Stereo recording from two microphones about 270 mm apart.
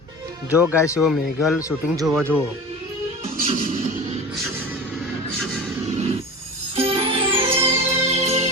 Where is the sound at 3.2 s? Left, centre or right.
Right.